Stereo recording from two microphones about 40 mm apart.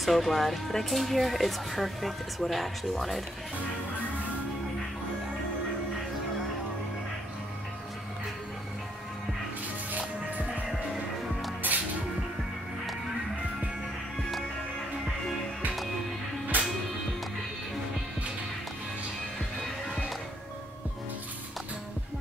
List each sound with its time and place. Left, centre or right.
0.0 s speech: centre
9.9 s music: right
11.6 s music: right
16.5 s music: right